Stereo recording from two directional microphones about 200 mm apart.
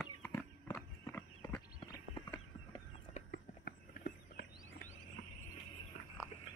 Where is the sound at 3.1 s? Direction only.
45° left (ahead or behind).